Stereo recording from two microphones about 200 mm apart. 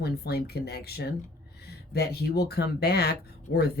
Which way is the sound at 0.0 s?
55° left (ahead or behind).